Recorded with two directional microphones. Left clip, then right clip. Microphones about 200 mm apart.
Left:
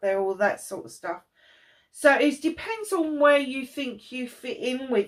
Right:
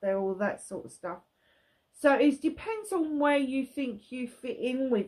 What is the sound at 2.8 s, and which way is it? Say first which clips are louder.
Speech: left 8 dB; 45° right (ahead or behind).